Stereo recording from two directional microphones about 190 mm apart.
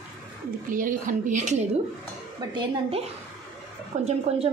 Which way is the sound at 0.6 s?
45° right (ahead or behind).